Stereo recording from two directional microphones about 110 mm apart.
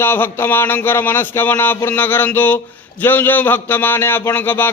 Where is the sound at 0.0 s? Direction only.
20° left (ahead or behind).